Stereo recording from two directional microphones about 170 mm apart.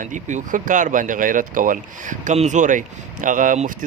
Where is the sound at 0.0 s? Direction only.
45° right (ahead or behind).